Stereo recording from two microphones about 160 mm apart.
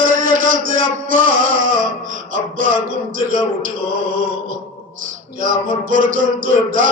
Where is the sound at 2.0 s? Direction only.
55° right (ahead or behind).